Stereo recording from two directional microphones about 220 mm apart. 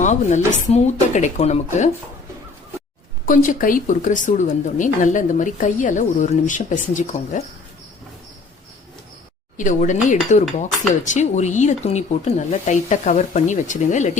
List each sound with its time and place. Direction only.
0.0 s a woman's voice: 35° left (ahead or behind)
3.2 s a woman's voice: 35° left (ahead or behind)
9.6 s a woman's voice: 35° left (ahead or behind)